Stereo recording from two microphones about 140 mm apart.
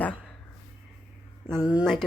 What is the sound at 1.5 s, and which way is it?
Speech, 5° right (ahead or behind).